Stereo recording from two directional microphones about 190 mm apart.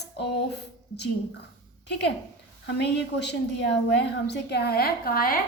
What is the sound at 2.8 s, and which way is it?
A woman's voice, 65° left (ahead or behind).